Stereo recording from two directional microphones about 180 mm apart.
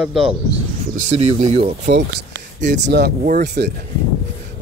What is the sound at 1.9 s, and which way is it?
Speech, 75° right (ahead or behind).